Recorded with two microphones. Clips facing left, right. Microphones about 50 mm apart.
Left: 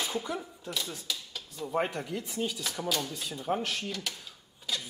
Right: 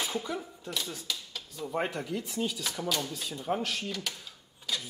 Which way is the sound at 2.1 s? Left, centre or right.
Centre.